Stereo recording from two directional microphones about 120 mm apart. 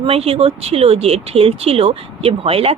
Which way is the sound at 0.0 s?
55° right (ahead or behind).